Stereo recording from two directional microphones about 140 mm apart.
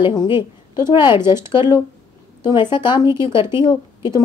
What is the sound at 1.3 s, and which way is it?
Speech, 20° right (ahead or behind).